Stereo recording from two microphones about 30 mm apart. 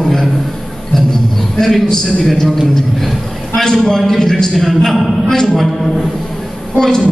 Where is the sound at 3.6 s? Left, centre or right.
Centre.